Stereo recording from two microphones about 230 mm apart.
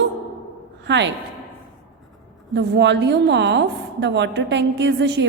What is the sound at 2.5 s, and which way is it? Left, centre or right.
A woman's voice, right.